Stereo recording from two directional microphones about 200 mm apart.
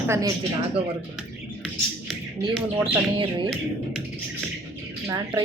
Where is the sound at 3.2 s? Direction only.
25° right (ahead or behind).